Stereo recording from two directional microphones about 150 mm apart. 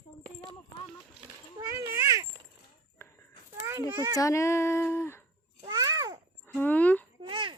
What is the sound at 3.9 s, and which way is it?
Speech, 20° right (ahead or behind).